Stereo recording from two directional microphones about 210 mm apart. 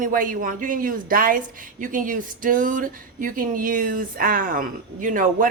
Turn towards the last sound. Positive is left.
turn(degrees=-40)  # may be behind; listen again after turning